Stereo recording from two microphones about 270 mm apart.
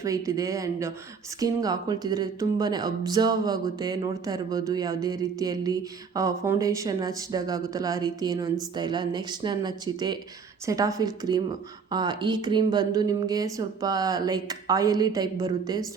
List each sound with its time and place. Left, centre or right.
0.0 s speech: centre